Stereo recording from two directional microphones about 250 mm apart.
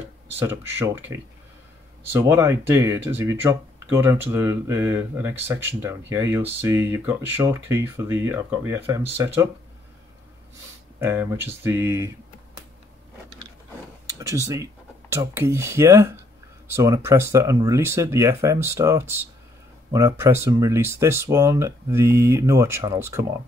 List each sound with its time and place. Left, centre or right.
0.4 s speech: centre
11.0 s speech: centre
14.1 s speech: centre